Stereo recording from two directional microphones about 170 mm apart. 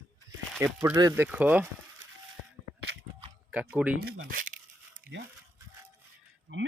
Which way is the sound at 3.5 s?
10° right (ahead or behind).